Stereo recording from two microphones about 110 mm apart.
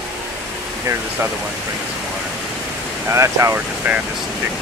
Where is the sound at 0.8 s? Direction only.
20° right (ahead or behind).